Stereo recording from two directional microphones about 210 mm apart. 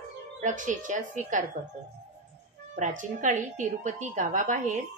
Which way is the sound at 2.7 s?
35° right (ahead or behind).